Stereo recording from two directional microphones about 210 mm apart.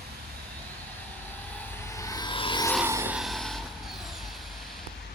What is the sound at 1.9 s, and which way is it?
Music, 15° left (ahead or behind).